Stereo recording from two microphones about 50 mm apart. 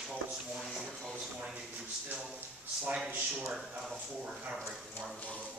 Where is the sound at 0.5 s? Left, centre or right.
Centre.